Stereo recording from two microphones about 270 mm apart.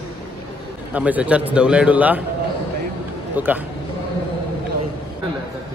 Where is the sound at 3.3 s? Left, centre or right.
Centre.